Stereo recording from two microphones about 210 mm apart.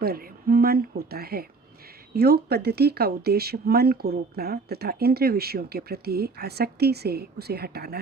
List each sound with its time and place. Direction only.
0.0 s speech: 45° right (ahead or behind)